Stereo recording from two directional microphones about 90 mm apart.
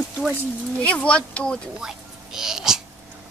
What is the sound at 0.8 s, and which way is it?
Speech, 15° left (ahead or behind).